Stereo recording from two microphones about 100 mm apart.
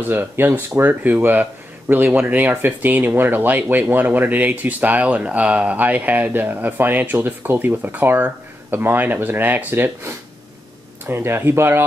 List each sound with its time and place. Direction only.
0.1 s speech: 20° right (ahead or behind)